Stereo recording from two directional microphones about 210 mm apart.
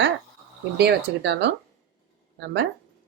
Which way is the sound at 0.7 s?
55° right (ahead or behind).